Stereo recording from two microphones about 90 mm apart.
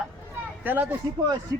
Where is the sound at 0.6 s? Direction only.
20° right (ahead or behind).